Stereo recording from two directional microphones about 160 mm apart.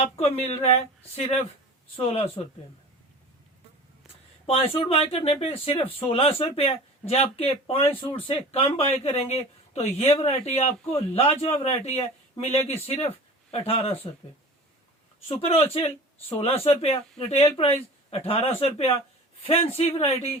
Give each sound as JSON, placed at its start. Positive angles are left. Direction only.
{"t": 0.0, "sound": "speech", "side_deg": 40}
{"t": 4.4, "sound": "speech", "side_deg": 35}
{"t": 15.3, "sound": "speech", "side_deg": 40}